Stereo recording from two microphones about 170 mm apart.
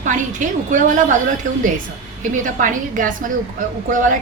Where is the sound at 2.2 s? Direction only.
50° right (ahead or behind).